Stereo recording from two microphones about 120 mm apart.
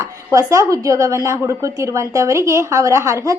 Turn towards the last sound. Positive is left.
turn(degrees=-25)  # may be behind; listen again after turning